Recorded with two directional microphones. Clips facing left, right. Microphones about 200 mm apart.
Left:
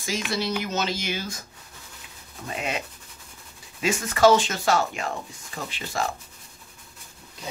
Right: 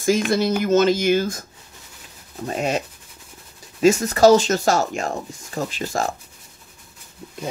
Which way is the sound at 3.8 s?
40° right (ahead or behind).